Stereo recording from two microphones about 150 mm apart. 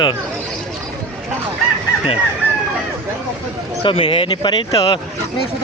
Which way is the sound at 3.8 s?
35° left (ahead or behind).